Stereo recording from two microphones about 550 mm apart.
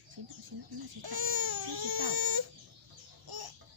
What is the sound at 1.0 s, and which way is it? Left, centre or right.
Baby cry, right.